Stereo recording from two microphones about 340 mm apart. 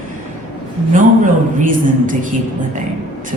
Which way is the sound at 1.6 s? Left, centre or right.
Right.